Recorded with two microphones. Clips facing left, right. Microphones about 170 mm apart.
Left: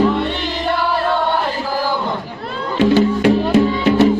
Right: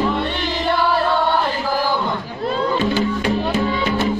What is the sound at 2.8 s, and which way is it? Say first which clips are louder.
Music: left 6 dB; 75° left (ahead or behind).